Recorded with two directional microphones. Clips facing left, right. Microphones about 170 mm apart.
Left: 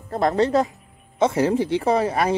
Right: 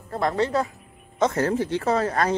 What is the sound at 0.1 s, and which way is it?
Speech, 25° left (ahead or behind).